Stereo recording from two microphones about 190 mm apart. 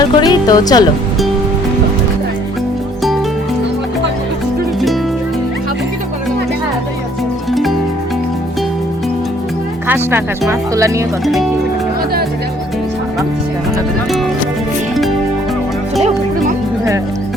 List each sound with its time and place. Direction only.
0.0 s speech: 20° left (ahead or behind)
9.8 s speech: 10° right (ahead or behind)
16.0 s music: 35° right (ahead or behind)